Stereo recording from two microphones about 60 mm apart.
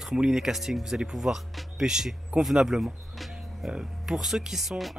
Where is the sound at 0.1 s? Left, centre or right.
Centre.